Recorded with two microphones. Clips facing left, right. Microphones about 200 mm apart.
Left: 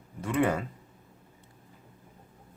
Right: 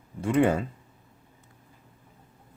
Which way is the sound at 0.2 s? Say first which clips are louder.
Right 4 dB; 30° right (ahead or behind).